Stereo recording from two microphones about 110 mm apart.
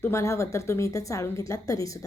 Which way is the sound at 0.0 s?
25° left (ahead or behind).